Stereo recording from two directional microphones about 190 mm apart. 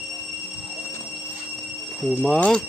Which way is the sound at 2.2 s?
5° left (ahead or behind).